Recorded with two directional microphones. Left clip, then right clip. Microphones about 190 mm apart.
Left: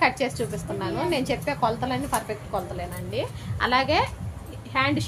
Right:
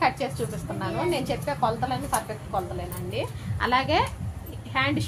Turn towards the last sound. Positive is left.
turn(degrees=5)  # may be behind; listen again after turning